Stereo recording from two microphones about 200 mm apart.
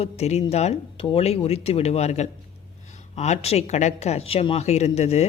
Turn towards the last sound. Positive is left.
turn(degrees=30)  # may be behind; listen again after turning